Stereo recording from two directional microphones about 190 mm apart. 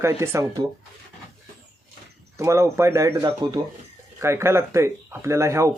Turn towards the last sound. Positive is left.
turn(degrees=-15)  # may be behind; listen again after turning